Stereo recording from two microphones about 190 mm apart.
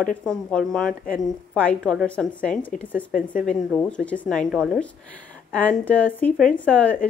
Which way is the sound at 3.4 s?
5° left (ahead or behind).